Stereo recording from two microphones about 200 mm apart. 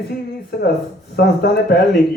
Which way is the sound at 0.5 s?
55° left (ahead or behind).